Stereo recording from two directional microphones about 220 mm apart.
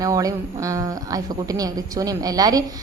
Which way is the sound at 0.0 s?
15° right (ahead or behind).